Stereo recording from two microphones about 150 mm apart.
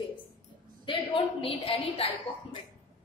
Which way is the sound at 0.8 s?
35° left (ahead or behind).